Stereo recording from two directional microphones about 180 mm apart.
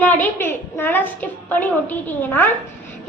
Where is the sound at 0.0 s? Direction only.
10° left (ahead or behind).